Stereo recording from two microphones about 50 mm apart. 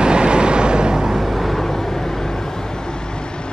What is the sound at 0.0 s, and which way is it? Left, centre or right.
Vehicle, centre.